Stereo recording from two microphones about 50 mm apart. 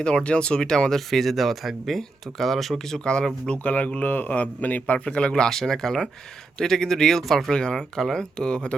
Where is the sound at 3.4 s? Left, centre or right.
Left.